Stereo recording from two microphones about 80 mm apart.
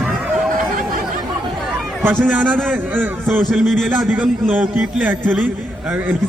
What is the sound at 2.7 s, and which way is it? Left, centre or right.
Speech, right.